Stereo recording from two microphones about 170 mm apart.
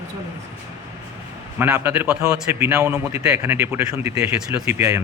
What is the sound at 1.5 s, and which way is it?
A man's voice, 15° right (ahead or behind).